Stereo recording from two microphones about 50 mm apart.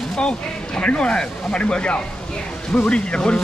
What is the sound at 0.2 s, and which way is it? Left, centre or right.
Speech, centre.